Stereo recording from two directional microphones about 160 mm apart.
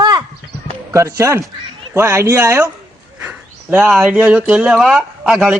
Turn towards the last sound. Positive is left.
turn(degrees=-5)  # may be behind; listen again after turning